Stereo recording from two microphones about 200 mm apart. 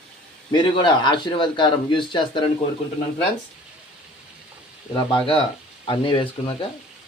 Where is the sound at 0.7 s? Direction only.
25° left (ahead or behind).